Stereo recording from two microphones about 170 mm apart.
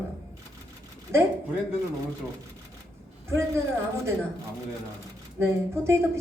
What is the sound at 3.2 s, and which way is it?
Speech, 15° right (ahead or behind).